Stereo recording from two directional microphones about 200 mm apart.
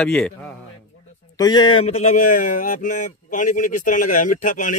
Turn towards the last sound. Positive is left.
turn(degrees=40)  # may be behind; listen again after turning